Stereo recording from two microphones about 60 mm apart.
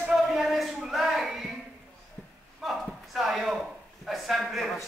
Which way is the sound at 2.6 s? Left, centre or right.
Centre.